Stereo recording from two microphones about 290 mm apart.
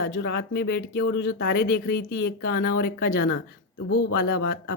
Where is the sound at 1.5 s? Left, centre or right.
Left.